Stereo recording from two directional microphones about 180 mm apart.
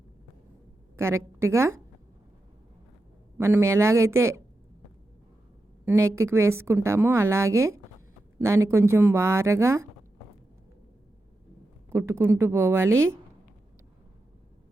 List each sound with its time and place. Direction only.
0.9 s a woman's voice: 15° right (ahead or behind)
3.3 s a woman's voice: 15° right (ahead or behind)
5.8 s a woman's voice: 15° right (ahead or behind)
11.9 s a woman's voice: 15° right (ahead or behind)